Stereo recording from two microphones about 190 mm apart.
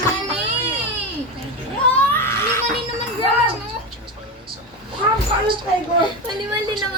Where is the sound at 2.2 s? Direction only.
15° left (ahead or behind).